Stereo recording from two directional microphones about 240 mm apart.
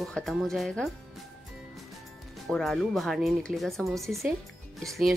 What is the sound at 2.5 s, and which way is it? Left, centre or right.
Speech, centre.